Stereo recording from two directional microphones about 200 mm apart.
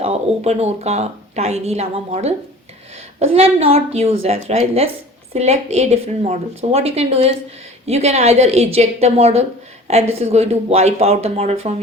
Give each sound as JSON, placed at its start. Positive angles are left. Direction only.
{"t": 0.0, "sound": "a woman's voice", "side_deg": -30}